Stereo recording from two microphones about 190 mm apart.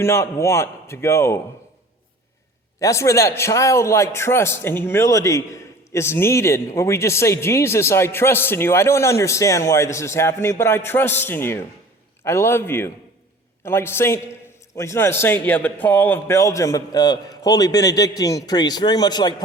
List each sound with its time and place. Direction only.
0.0 s speech: 15° left (ahead or behind)
2.8 s speech: 15° left (ahead or behind)